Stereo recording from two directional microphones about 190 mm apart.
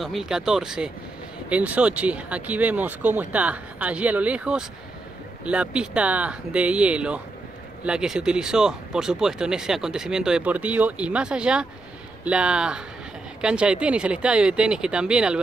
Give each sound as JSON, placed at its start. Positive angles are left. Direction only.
{"t": 0.0, "sound": "speech", "side_deg": 0}